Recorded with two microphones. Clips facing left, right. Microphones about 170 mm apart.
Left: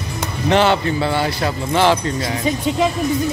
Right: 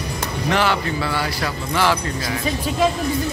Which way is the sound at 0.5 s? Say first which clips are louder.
Left 6 dB; 25° left (ahead or behind).